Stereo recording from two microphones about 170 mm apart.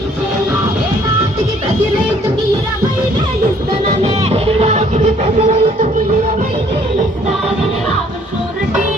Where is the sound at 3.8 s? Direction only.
35° right (ahead or behind).